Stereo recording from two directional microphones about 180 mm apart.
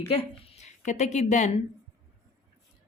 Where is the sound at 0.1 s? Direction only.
35° left (ahead or behind).